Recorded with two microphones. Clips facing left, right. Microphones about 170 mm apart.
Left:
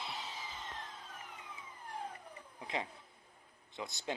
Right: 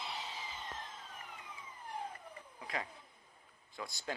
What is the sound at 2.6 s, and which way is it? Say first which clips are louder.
Speech: left 2 dB; 25° left (ahead or behind).